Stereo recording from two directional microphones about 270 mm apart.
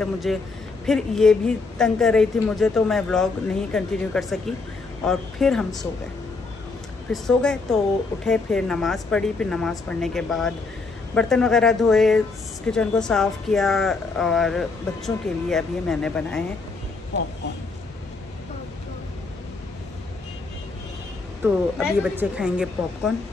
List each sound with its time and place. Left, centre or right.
0.0 s speech: centre
7.1 s speech: centre
21.4 s speech: centre